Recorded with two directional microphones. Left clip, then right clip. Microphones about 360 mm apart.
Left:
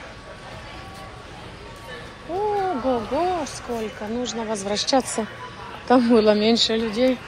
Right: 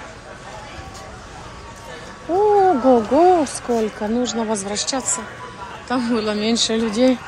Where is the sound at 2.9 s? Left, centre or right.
Centre.